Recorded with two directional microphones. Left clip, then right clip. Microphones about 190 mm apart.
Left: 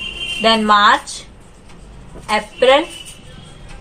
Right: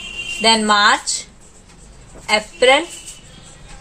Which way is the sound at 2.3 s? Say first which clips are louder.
Even; 45° right (ahead or behind).